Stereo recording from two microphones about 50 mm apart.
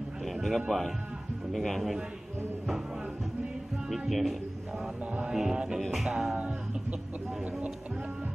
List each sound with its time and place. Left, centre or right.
0.2 s speech: centre
3.9 s music: centre
5.8 s speech: centre
6.0 s music: centre
6.4 s music: right